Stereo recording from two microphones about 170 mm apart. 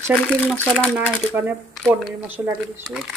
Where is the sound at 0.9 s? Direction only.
10° right (ahead or behind).